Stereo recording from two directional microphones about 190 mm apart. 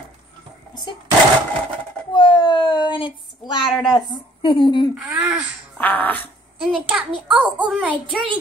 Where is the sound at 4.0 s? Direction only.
25° left (ahead or behind).